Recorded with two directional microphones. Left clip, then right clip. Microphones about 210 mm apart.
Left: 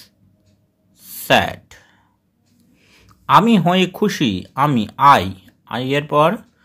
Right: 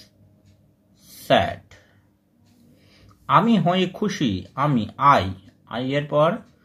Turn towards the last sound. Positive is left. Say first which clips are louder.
# left 5 dB
turn(degrees=40)  # may be behind; listen again after turning